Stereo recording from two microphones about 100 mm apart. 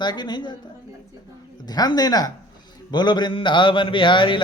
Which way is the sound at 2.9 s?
45° left (ahead or behind).